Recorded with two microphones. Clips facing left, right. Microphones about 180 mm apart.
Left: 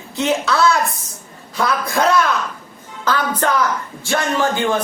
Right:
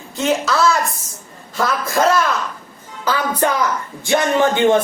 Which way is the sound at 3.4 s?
15° right (ahead or behind).